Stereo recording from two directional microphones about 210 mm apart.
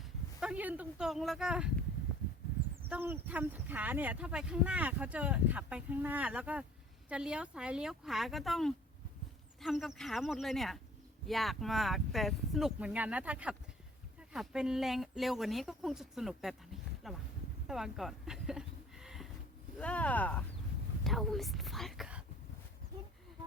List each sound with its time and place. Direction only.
0.3 s speech: 5° right (ahead or behind)
2.9 s speech: 10° right (ahead or behind)
17.7 s a sound: centre (ahead or behind)
19.8 s speech: 5° left (ahead or behind)